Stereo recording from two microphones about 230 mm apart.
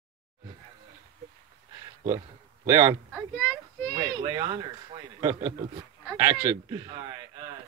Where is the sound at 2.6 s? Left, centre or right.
Centre.